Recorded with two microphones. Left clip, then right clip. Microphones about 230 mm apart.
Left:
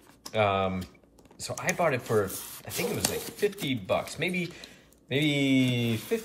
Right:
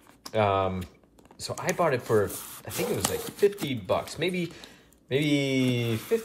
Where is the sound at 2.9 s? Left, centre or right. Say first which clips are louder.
Right 2 dB; centre.